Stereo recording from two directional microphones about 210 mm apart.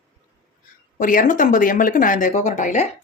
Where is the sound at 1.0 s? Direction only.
40° left (ahead or behind).